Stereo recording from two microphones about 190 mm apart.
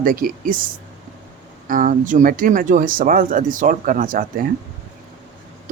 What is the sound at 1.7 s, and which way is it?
Speech, 45° right (ahead or behind).